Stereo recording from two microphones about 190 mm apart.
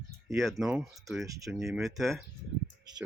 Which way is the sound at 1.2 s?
15° right (ahead or behind).